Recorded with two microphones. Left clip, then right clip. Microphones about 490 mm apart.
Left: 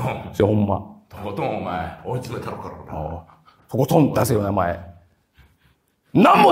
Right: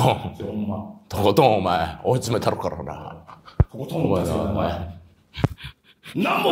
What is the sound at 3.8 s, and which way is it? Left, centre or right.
Speech, left.